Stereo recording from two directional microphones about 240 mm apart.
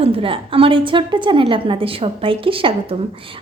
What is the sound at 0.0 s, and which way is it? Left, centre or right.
A woman's voice, right.